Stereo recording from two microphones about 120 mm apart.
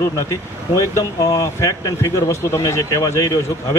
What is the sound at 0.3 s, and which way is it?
Speech, 25° left (ahead or behind).